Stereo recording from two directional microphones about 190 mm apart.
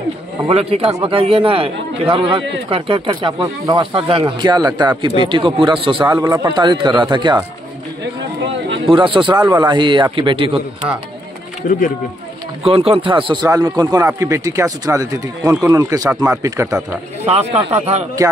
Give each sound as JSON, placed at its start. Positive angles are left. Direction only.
{"t": 0.5, "sound": "speech", "side_deg": -30}
{"t": 8.8, "sound": "speech", "side_deg": -25}
{"t": 12.6, "sound": "speech", "side_deg": -30}
{"t": 17.3, "sound": "speech", "side_deg": -35}